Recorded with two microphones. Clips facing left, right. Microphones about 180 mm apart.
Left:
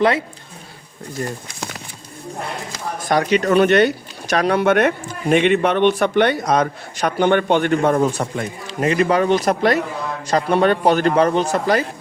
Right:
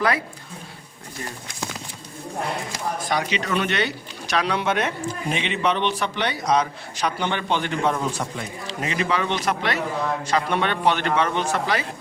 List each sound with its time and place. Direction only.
3.1 s a man's voice: 50° left (ahead or behind)